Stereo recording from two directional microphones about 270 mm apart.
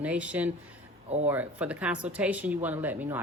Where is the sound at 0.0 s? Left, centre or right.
Centre.